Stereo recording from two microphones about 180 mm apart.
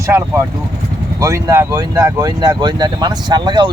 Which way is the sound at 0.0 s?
15° right (ahead or behind).